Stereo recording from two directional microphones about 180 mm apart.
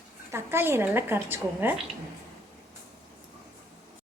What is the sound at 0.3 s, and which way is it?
A woman's voice, 15° right (ahead or behind).